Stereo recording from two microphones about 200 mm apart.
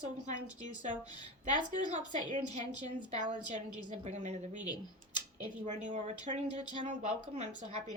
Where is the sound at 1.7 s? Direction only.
40° right (ahead or behind).